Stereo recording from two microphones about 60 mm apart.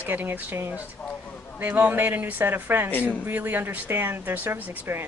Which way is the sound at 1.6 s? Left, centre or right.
Right.